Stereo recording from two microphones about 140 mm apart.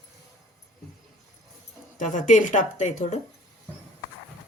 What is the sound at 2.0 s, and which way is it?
Speech, 65° left (ahead or behind).